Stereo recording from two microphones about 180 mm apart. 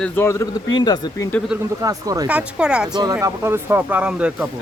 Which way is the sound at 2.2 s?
5° right (ahead or behind).